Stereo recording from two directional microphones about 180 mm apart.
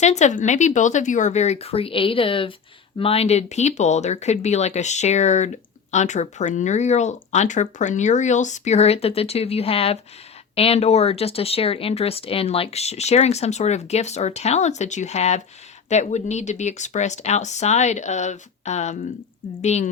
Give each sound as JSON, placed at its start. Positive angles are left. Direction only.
{"t": 0.0, "sound": "speech", "side_deg": 40}